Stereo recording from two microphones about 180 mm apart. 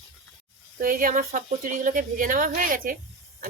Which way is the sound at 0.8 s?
50° right (ahead or behind).